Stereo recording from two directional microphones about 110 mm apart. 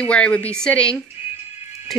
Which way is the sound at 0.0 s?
10° left (ahead or behind).